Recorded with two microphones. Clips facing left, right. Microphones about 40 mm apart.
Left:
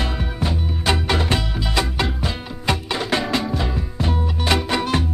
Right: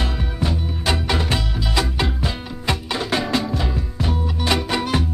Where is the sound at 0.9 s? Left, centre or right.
Centre.